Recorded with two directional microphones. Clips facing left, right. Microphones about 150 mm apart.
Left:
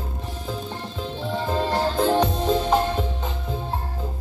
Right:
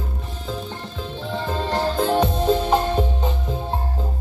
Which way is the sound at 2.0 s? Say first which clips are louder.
Right 3 dB; 5° right (ahead or behind).